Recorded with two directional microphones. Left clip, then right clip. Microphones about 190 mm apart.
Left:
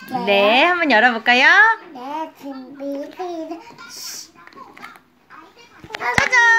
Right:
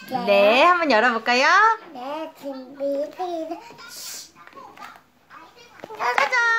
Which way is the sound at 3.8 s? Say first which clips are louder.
Left 4 dB; 25° right (ahead or behind).